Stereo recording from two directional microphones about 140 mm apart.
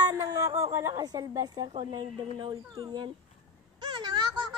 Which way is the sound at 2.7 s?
30° right (ahead or behind).